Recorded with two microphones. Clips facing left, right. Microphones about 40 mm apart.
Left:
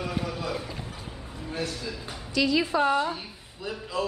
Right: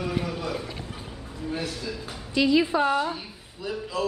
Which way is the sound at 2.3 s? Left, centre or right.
Centre.